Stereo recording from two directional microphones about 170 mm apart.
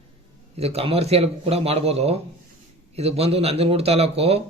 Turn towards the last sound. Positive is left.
turn(degrees=-35)  # may be behind; listen again after turning